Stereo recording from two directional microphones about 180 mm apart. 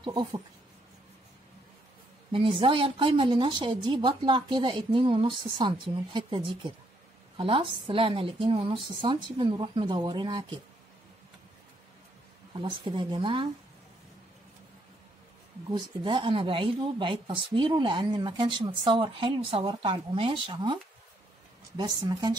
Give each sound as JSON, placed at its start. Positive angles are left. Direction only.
{"t": 0.0, "sound": "speech", "side_deg": -25}
{"t": 2.6, "sound": "speech", "side_deg": -30}
{"t": 12.5, "sound": "speech", "side_deg": -25}
{"t": 15.7, "sound": "speech", "side_deg": -25}